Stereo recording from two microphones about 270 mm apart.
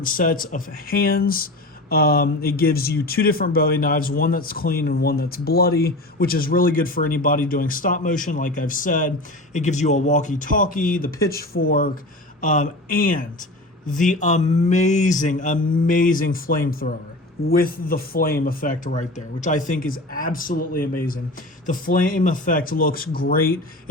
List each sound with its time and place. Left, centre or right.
0.0 s speech: left